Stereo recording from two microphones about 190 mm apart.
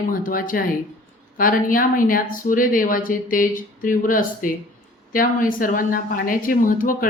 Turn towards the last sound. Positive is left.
turn(degrees=45)  # may be behind; listen again after turning